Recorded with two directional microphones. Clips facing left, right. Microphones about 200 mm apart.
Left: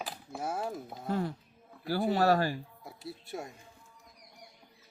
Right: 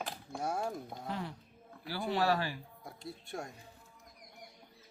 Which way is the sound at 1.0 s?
45° left (ahead or behind).